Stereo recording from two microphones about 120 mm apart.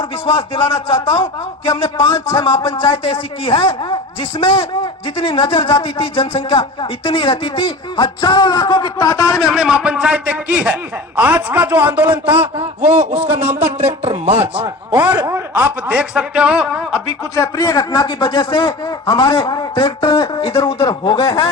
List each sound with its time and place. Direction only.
0.3 s a man's voice: 50° left (ahead or behind)
2.3 s a man's voice: 45° left (ahead or behind); by 9.4 s 25° left (ahead or behind)
9.4 s a man's voice: 5° right (ahead or behind)
13.8 s speech: 65° right (ahead or behind)
14.9 s a man's voice: 10° right (ahead or behind)
17.3 s a man's voice: 30° left (ahead or behind)
20.1 s a man's voice: 30° left (ahead or behind)